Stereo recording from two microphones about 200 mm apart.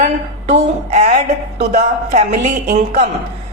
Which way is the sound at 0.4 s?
35° right (ahead or behind).